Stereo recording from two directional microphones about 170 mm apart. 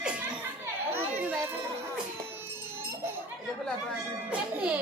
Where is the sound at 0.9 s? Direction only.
10° right (ahead or behind).